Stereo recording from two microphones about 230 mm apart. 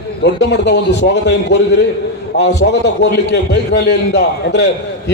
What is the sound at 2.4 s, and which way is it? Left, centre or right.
A man's voice, left.